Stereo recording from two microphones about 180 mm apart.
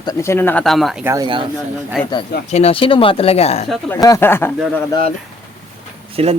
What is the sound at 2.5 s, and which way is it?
Speech, 35° left (ahead or behind).